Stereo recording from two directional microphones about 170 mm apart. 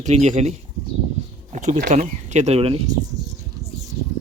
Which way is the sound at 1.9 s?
45° right (ahead or behind).